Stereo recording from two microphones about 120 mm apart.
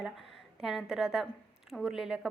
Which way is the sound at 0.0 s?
5° right (ahead or behind).